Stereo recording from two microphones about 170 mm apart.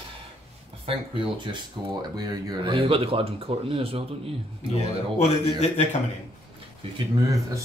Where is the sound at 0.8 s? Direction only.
30° right (ahead or behind).